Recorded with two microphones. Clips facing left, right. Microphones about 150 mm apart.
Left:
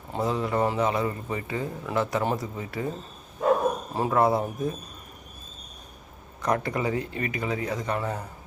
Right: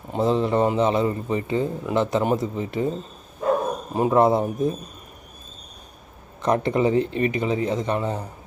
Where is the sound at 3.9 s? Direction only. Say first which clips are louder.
Right 6 dB; 20° right (ahead or behind).